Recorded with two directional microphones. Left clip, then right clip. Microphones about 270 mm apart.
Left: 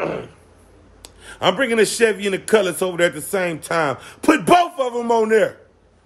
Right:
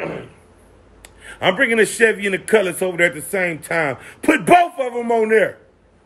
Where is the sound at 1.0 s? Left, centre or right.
Centre.